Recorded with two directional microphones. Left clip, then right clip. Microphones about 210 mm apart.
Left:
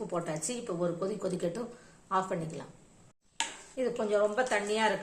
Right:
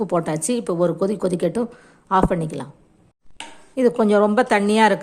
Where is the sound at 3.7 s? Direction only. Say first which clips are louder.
Right 13 dB; 50° right (ahead or behind).